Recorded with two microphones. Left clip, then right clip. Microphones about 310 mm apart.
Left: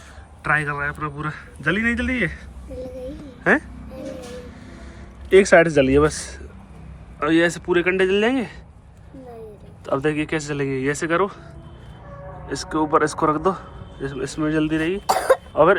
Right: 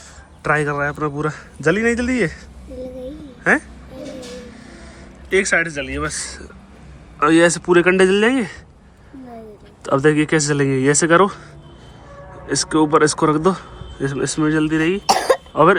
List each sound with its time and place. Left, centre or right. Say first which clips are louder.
0.4 s a man's voice: right 3 dB; centre
3.5 s speech: right 2 dB; centre
5.3 s a man's voice: left 4 dB; centre
9.8 s a man's voice: right 6 dB; centre
12.5 s a man's voice: right 5 dB; centre
15.0 s cough: right 1 dB; right